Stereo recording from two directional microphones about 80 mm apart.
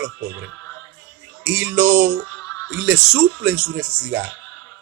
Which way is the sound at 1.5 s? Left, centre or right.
Centre.